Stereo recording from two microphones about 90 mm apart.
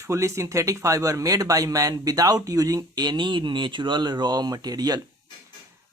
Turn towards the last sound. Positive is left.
turn(degrees=-45)  # may be behind; listen again after turning